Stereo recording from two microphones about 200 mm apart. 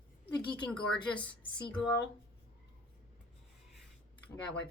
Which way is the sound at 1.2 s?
25° left (ahead or behind).